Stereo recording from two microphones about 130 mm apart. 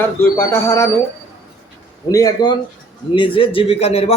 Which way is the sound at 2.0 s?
30° left (ahead or behind).